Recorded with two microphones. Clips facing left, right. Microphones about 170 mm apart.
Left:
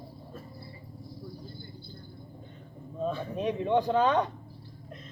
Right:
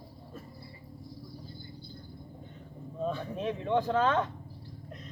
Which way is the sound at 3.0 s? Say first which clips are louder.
Left 2 dB; centre (ahead or behind).